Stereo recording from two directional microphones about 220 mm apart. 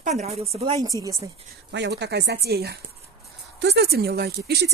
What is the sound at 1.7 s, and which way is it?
Speech, 50° right (ahead or behind).